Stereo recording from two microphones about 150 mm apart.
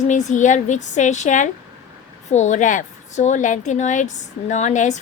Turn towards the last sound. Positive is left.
turn(degrees=55)  # may be behind; listen again after turning